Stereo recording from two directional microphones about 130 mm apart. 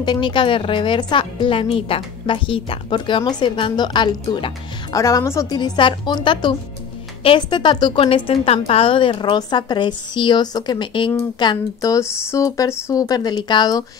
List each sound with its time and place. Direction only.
0.0 s a woman's voice: 35° left (ahead or behind)
4.9 s speech: 25° left (ahead or behind)
5.6 s a woman's voice: 35° left (ahead or behind)